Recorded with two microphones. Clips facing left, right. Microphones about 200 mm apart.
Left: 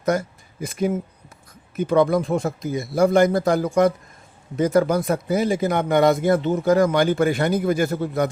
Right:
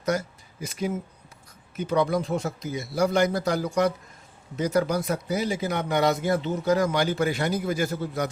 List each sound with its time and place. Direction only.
0.0 s speech: 55° left (ahead or behind)